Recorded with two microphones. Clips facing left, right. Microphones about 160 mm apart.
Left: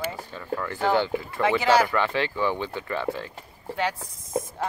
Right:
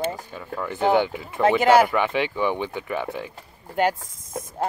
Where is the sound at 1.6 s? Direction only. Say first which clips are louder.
Right 4 dB; 55° right (ahead or behind).